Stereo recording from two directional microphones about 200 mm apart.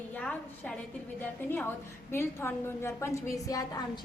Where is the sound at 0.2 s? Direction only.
5° left (ahead or behind).